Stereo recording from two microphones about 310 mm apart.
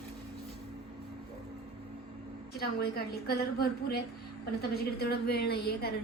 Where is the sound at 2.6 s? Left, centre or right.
Left.